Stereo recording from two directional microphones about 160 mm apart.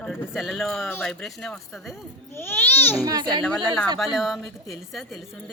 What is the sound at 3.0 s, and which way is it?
Speech, 25° right (ahead or behind).